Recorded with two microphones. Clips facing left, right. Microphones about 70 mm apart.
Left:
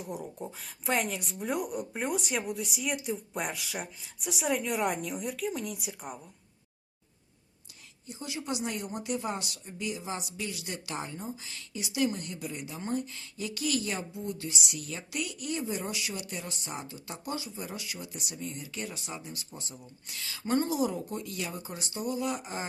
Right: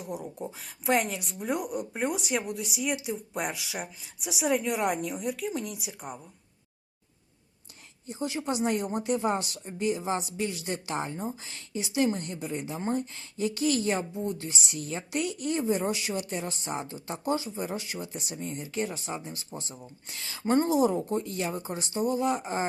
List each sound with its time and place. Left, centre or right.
0.0 s a woman's voice: centre
8.0 s a woman's voice: right